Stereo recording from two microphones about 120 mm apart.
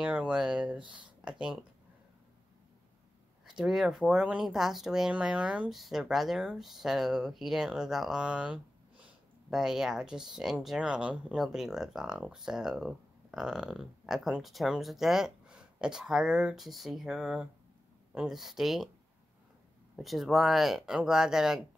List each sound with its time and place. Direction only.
0.0 s speech: 10° right (ahead or behind)
0.8 s speech: 40° right (ahead or behind)
3.4 s speech: 5° right (ahead or behind)
20.0 s speech: centre (ahead or behind)